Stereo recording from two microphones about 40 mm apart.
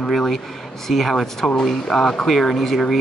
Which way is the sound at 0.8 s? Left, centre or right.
Centre.